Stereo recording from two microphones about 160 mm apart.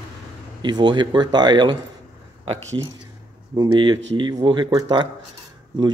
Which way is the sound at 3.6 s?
30° right (ahead or behind).